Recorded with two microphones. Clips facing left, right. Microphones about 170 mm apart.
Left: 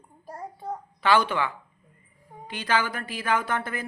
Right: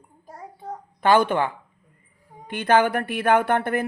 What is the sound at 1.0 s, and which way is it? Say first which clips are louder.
A woman's voice: right 4 dB; 50° right (ahead or behind).